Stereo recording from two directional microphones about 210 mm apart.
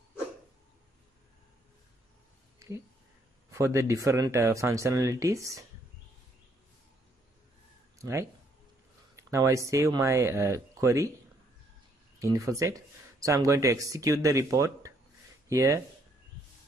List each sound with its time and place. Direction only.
3.5 s speech: 15° right (ahead or behind)
8.0 s speech: 15° right (ahead or behind)
12.2 s speech: 15° right (ahead or behind)